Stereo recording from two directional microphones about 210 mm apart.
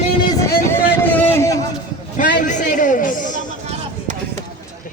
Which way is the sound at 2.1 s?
40° left (ahead or behind).